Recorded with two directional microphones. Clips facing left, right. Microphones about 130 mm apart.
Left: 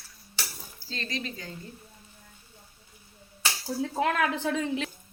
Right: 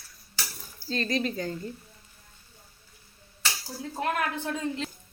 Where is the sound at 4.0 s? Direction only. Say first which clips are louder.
Left 2 dB; 90° left.